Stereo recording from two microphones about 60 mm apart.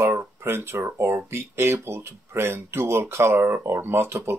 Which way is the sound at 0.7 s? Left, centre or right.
Right.